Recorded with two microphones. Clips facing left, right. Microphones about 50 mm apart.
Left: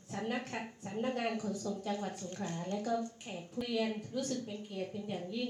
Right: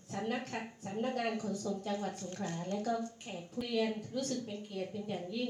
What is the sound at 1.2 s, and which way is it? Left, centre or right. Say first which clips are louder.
A woman's voice: even; left.